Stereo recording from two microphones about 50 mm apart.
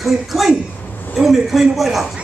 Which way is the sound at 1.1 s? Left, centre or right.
Centre.